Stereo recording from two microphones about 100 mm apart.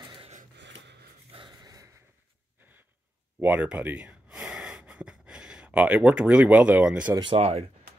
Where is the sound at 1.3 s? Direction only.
60° right (ahead or behind).